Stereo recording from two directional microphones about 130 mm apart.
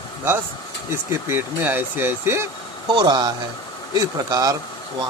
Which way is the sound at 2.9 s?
35° right (ahead or behind).